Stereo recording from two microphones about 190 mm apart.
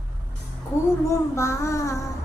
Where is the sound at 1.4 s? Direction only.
15° left (ahead or behind).